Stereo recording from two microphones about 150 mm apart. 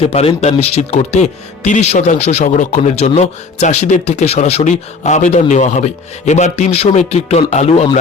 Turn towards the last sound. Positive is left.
turn(degrees=45)  # may be behind; listen again after turning